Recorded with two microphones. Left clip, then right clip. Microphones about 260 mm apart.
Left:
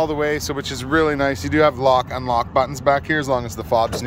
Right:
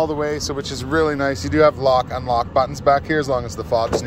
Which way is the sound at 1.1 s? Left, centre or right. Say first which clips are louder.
Left 1 dB; left.